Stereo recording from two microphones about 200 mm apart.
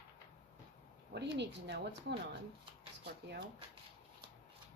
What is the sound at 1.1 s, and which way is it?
Speech, 60° right (ahead or behind).